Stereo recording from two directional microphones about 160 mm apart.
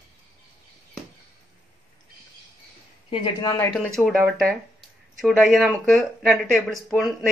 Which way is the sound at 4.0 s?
5° right (ahead or behind).